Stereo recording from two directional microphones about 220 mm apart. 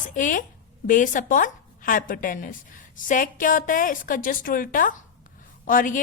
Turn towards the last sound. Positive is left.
turn(degrees=40)  # may be behind; listen again after turning